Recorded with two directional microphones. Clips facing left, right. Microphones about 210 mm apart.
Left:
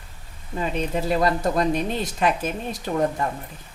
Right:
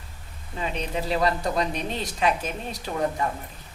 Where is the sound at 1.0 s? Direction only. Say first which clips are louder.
Left 2 dB; 45° left (ahead or behind).